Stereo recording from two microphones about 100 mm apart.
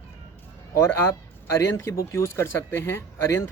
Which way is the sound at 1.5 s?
30° left (ahead or behind).